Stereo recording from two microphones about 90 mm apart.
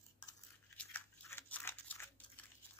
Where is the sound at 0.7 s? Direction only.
20° left (ahead or behind).